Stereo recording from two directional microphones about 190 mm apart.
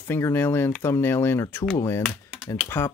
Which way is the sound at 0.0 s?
15° left (ahead or behind).